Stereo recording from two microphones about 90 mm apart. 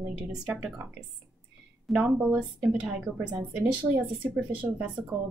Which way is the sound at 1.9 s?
15° right (ahead or behind).